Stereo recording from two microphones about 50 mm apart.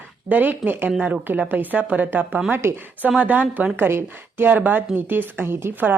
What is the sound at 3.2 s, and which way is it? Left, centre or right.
A woman's voice, right.